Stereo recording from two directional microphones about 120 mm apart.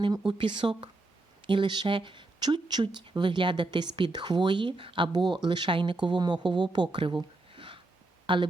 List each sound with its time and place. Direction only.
0.3 s speech: 40° right (ahead or behind)